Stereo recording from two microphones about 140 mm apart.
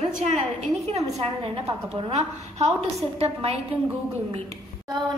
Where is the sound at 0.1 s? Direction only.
55° right (ahead or behind).